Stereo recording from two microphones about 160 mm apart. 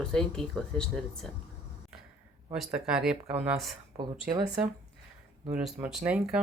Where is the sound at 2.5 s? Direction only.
Centre (ahead or behind).